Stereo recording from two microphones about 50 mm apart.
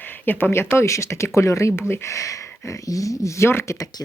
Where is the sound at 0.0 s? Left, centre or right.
Left.